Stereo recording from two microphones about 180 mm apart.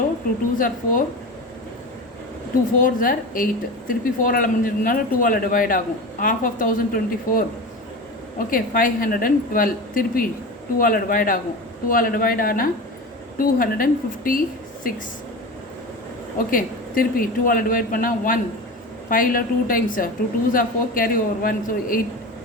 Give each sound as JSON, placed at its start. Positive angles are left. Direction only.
{"t": 0.6, "sound": "a woman's voice", "side_deg": 50}
{"t": 2.7, "sound": "a woman's voice", "side_deg": 50}
{"t": 16.5, "sound": "a woman's voice", "side_deg": 50}